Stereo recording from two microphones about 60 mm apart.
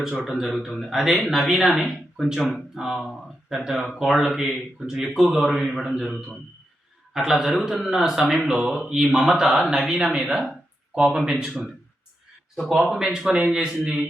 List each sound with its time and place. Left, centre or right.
0.3 s speech: centre
5.2 s a man's voice: centre
6.0 s speech: centre